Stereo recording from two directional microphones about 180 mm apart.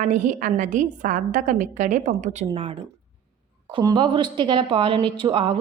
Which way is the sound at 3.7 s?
25° right (ahead or behind).